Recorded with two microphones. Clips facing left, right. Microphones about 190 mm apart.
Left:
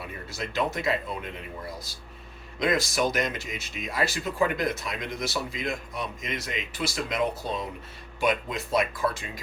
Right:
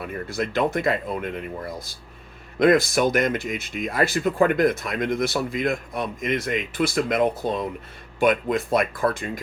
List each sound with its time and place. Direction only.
0.0 s speech: 55° right (ahead or behind)